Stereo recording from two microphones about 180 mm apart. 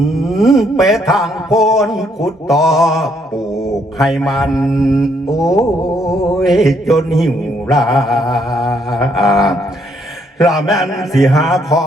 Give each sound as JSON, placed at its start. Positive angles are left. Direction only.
{"t": 0.0, "sound": "mantra", "side_deg": 0}
{"t": 5.8, "sound": "a sound", "side_deg": 20}
{"t": 6.4, "sound": "mantra", "side_deg": 0}